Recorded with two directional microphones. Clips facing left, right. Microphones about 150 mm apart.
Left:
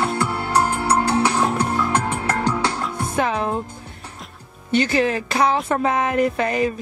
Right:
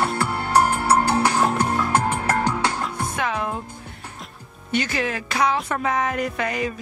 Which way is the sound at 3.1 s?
30° left (ahead or behind).